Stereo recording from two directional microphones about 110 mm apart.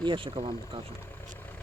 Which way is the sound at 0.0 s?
50° right (ahead or behind).